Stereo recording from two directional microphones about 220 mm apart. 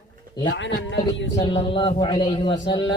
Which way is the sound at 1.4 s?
25° left (ahead or behind).